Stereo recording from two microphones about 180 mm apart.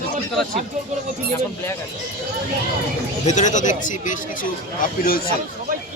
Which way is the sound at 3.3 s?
40° left (ahead or behind).